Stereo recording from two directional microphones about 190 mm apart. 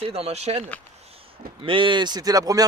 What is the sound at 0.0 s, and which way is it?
Speech, 30° right (ahead or behind).